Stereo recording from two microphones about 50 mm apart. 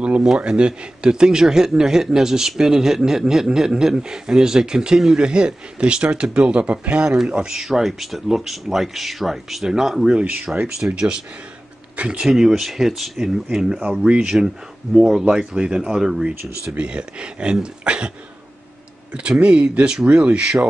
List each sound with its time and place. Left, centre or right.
0.0 s a man's voice: right
7.5 s a man's voice: centre
19.1 s speech: right